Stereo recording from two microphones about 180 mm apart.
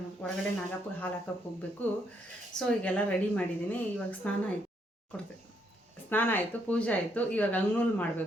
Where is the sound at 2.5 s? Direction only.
5° left (ahead or behind).